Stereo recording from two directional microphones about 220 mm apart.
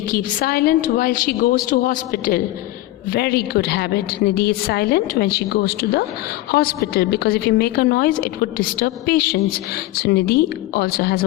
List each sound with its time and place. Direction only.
0.1 s a woman's voice: 35° left (ahead or behind)